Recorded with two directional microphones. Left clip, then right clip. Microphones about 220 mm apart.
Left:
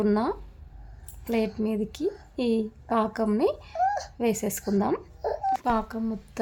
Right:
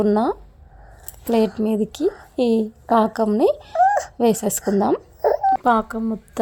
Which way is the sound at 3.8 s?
40° right (ahead or behind).